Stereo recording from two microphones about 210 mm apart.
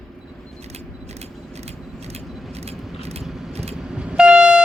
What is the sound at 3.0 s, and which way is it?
Vehicle, 30° right (ahead or behind).